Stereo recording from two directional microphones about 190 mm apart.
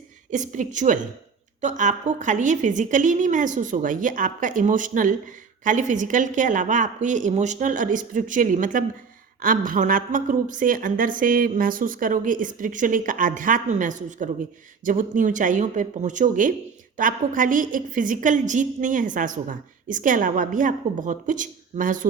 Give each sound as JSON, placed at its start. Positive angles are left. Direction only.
{"t": 0.3, "sound": "a woman's voice", "side_deg": -40}